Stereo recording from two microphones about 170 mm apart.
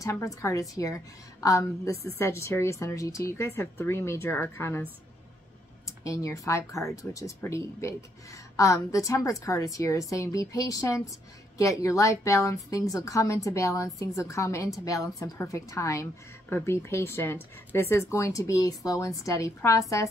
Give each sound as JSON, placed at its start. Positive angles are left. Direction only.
{"t": 0.0, "sound": "a woman's voice", "side_deg": 20}
{"t": 6.0, "sound": "a woman's voice", "side_deg": 20}